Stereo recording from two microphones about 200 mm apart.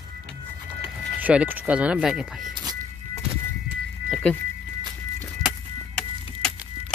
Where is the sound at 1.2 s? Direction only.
10° right (ahead or behind).